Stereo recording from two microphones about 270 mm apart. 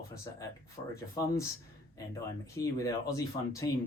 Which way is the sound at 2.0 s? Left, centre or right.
Centre.